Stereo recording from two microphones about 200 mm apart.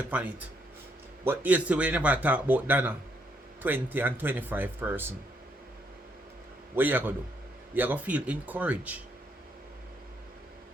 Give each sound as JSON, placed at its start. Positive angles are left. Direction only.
{"t": 0.1, "sound": "speech", "side_deg": -10}
{"t": 6.7, "sound": "speech", "side_deg": -10}